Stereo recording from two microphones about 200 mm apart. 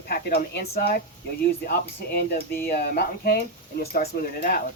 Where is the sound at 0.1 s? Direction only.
50° left (ahead or behind).